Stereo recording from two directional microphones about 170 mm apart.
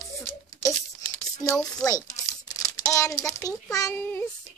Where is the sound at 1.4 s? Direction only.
20° left (ahead or behind).